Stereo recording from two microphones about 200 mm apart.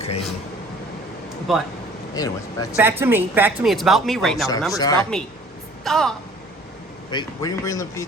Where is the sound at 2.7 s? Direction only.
10° right (ahead or behind).